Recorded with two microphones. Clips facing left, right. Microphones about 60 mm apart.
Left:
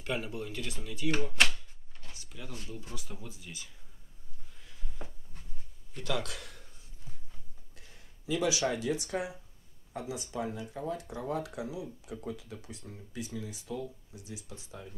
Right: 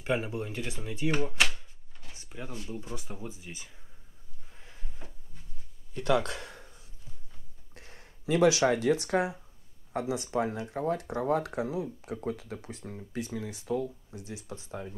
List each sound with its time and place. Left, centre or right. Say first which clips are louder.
0.0 s speech: right 5 dB; right
1.5 s a sound: right 1 dB; centre
2.1 s drawer open or close: right 4 dB; right
2.6 s speech: right 5 dB; right
5.9 s speech: right 8 dB; right
7.7 s speech: right 6 dB; right